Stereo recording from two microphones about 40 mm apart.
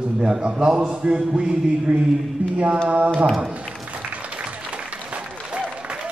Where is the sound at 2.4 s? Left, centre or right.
Right.